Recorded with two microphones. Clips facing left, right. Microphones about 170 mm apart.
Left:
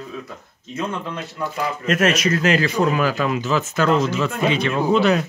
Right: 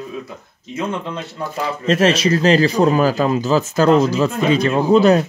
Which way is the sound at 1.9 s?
30° right (ahead or behind).